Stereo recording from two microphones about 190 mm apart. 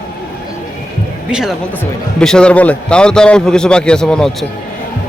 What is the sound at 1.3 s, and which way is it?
A man's voice, centre (ahead or behind).